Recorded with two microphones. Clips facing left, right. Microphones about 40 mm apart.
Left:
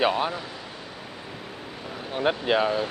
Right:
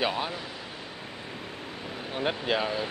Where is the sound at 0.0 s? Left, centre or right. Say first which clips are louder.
Left 5 dB; centre.